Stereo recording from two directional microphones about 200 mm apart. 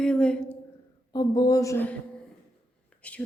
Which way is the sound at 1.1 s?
20° left (ahead or behind).